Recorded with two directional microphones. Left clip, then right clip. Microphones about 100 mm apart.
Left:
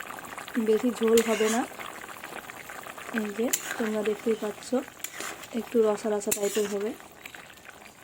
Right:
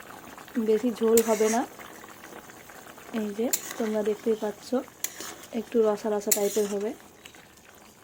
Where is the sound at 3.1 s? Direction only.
Centre (ahead or behind).